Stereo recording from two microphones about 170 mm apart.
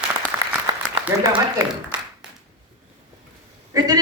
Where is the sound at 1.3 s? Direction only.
10° right (ahead or behind).